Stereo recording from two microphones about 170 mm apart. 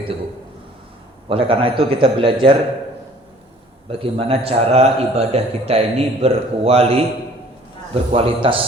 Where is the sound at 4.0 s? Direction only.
35° right (ahead or behind).